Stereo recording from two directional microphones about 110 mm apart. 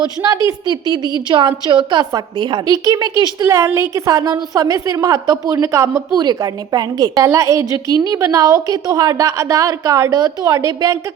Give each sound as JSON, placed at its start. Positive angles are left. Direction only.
{"t": 1.3, "sound": "a woman's voice", "side_deg": -45}
{"t": 2.6, "sound": "a woman's voice", "side_deg": -35}